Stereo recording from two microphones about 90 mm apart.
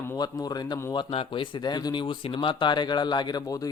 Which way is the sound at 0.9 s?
80° left.